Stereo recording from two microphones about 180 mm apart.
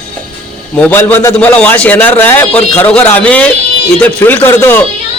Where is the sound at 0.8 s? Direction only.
10° left (ahead or behind).